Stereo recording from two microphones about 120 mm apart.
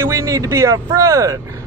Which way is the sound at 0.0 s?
25° right (ahead or behind).